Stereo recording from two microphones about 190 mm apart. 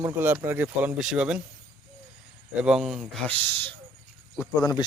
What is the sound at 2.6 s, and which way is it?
Speech, centre (ahead or behind).